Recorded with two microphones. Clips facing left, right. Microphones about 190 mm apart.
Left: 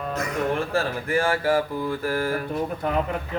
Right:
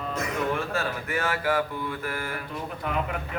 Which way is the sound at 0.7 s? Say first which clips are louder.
Left 5 dB; 30° left (ahead or behind).